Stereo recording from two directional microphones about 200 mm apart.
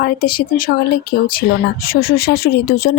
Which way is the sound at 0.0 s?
50° left (ahead or behind).